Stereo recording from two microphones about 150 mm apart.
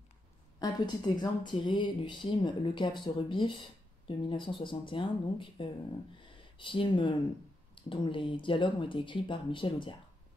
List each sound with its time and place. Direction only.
0.6 s speech: 30° left (ahead or behind)
6.2 s a sound: 35° left (ahead or behind)
7.7 s speech: 35° left (ahead or behind)